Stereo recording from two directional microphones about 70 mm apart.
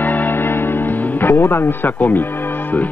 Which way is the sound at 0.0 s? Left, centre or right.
Left.